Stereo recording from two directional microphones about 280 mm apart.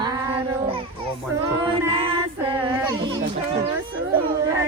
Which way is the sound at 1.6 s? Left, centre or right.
Centre.